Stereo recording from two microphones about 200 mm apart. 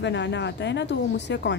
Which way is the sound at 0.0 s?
60° left (ahead or behind).